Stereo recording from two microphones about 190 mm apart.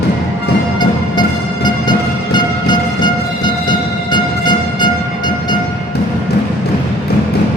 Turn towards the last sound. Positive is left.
turn(degrees=25)  # may be behind; listen again after turning